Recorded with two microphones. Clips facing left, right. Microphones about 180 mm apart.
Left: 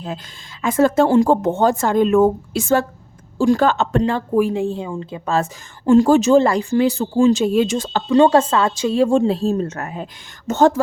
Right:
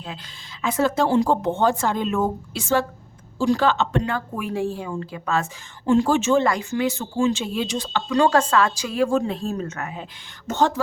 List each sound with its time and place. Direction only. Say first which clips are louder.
0.6 s speech: left 6 dB; 45° left (ahead or behind)
4.0 s a woman's voice: left 10 dB; 30° left (ahead or behind); by 8.0 s 45° left (ahead or behind)
8.1 s a woman's voice: left 5 dB; 25° left (ahead or behind); by 10.8 s 45° left (ahead or behind)